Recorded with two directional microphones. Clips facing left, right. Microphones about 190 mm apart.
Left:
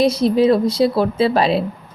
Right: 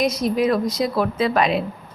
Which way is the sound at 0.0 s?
30° left (ahead or behind).